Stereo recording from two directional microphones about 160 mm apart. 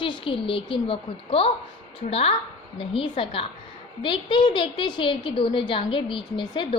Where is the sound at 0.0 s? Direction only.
30° left (ahead or behind).